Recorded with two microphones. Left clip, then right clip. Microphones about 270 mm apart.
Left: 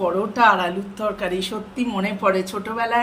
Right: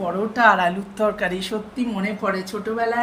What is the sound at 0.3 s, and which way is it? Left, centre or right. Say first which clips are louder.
A woman's voice: right 1 dB; centre.